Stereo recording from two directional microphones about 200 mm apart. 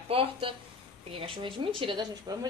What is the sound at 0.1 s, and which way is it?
A woman's voice, 25° right (ahead or behind).